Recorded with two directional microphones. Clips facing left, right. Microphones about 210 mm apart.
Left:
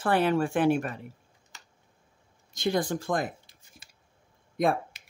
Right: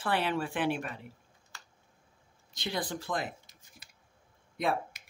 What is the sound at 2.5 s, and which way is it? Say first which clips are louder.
Speech: left 8 dB; 45° left (ahead or behind).